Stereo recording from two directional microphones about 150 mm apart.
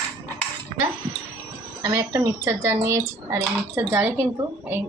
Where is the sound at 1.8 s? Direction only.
25° right (ahead or behind).